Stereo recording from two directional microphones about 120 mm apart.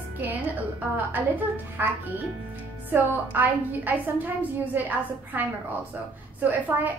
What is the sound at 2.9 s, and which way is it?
A woman's voice, 15° right (ahead or behind).